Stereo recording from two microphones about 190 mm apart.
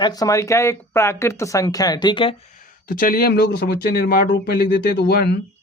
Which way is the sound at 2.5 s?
45° left (ahead or behind).